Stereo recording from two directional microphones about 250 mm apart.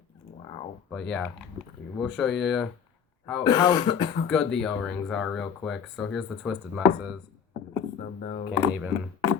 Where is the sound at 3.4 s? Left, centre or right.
Centre.